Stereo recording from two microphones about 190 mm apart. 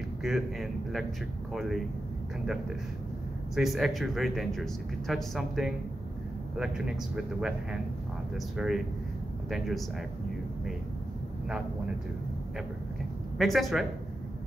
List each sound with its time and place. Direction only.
0.2 s speech: centre (ahead or behind)
3.5 s speech: centre (ahead or behind)
13.4 s speech: centre (ahead or behind)